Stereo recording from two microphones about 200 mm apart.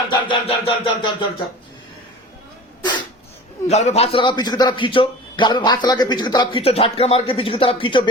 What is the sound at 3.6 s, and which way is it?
A man's voice, 35° left (ahead or behind).